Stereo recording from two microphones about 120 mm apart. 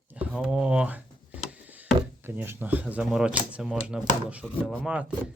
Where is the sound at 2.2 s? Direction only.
20° right (ahead or behind).